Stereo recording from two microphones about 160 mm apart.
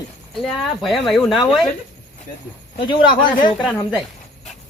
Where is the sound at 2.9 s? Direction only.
30° left (ahead or behind).